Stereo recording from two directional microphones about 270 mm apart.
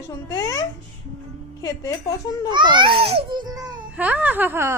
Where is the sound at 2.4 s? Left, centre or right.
Centre.